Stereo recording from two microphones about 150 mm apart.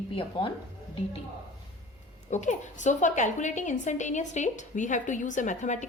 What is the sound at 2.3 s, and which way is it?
A woman's voice, 50° left (ahead or behind).